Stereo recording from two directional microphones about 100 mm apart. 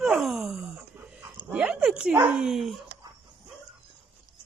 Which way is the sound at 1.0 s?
15° right (ahead or behind).